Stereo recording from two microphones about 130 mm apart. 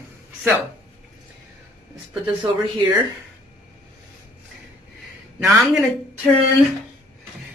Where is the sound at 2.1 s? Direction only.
35° right (ahead or behind).